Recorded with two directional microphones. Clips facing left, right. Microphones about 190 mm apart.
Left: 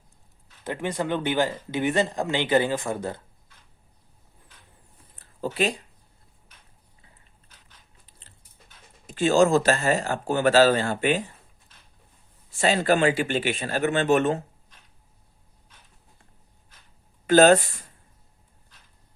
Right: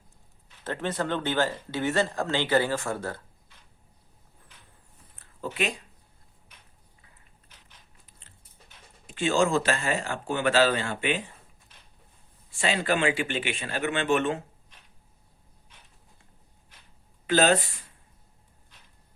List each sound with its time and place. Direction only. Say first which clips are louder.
0.6 s speech: left 2 dB; 10° left (ahead or behind)
5.5 s speech: left 5 dB; 35° left (ahead or behind)
9.0 s speech: left 5 dB; 40° left (ahead or behind)
12.5 s speech: left 5 dB; 40° left (ahead or behind)
17.2 s speech: left 6 dB; 45° left (ahead or behind)